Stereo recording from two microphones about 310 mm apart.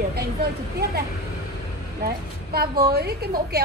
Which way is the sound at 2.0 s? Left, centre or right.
Right.